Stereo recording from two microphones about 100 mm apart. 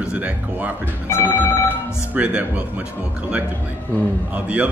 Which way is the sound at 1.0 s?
25° left (ahead or behind).